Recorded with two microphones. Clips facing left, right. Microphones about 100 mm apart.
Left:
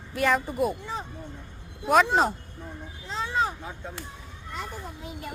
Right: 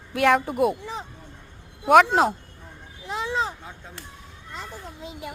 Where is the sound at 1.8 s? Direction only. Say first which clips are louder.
Right 5 dB; 80° right.